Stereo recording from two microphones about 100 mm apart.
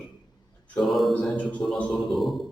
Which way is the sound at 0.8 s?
Centre (ahead or behind).